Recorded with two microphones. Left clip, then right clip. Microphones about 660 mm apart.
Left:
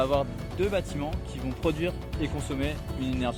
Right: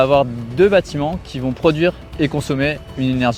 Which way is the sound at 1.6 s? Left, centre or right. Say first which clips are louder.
Right 14 dB; right.